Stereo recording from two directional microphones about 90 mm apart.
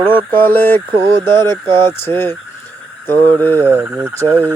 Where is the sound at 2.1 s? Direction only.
25° left (ahead or behind).